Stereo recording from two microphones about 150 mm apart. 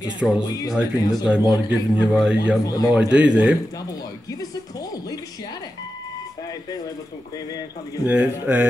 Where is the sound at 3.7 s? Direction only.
25° left (ahead or behind).